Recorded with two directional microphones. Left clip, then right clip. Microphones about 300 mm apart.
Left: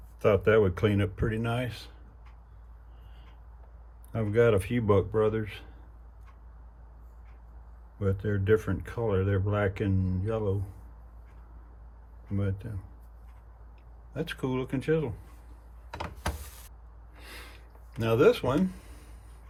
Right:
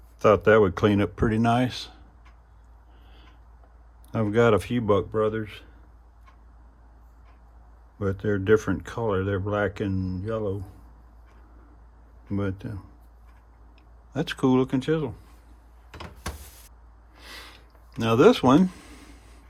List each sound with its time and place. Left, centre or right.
0.2 s speech: centre
4.1 s speech: centre
7.9 s speech: centre
12.4 s speech: centre
14.1 s speech: centre
18.0 s speech: centre